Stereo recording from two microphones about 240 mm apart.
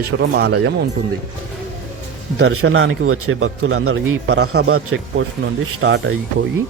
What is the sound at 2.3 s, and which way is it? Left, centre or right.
A man's voice, right.